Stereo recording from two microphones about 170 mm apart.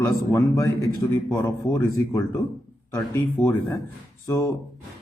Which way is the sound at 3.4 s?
15° left (ahead or behind).